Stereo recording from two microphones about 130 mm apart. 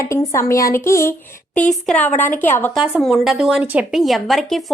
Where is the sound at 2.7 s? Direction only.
5° right (ahead or behind).